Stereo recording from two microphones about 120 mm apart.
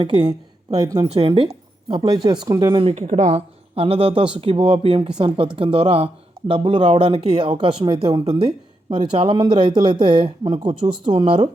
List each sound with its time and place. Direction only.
0.0 s speech: 40° right (ahead or behind)
1.1 s speech: 50° right (ahead or behind)
1.5 s speech: 35° right (ahead or behind)
2.8 s speech: 65° right (ahead or behind)
7.3 s speech: 40° right (ahead or behind)